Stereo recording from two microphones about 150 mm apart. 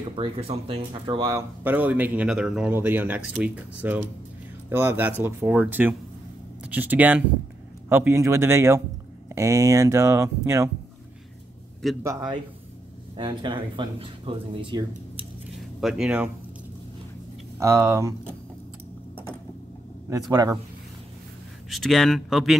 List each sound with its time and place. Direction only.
0.1 s speech: 40° right (ahead or behind)
1.3 s speech: 10° right (ahead or behind)
12.0 s speech: 25° right (ahead or behind)
15.8 s speech: 5° right (ahead or behind)
17.6 s speech: 20° right (ahead or behind)
20.1 s speech: 25° right (ahead or behind)
21.6 s speech: centre (ahead or behind)